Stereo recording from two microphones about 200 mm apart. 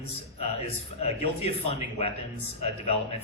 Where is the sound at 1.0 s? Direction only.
30° left (ahead or behind).